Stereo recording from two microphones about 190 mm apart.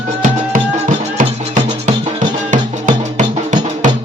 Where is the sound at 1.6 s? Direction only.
35° right (ahead or behind).